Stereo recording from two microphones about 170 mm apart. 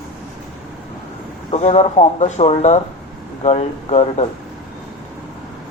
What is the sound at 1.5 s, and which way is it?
Speech, 40° left (ahead or behind).